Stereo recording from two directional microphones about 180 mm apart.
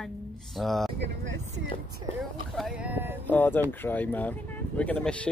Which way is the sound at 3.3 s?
10° left (ahead or behind).